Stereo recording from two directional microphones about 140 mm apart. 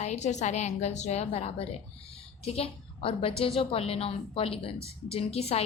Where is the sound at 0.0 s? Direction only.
55° left (ahead or behind).